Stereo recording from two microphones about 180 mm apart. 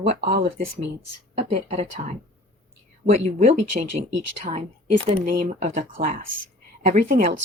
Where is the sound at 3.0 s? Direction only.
40° right (ahead or behind).